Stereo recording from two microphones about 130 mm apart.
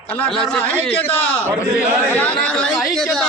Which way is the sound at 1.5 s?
15° right (ahead or behind).